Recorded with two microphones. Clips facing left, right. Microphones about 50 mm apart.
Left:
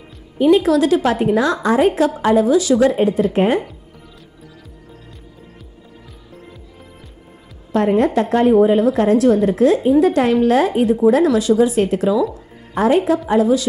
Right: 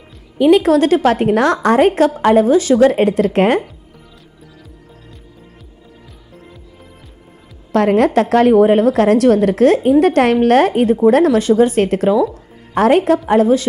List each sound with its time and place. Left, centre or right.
0.4 s a woman's voice: right
2.9 s a woman's voice: right
7.7 s a woman's voice: right
11.0 s a woman's voice: right
12.7 s a woman's voice: right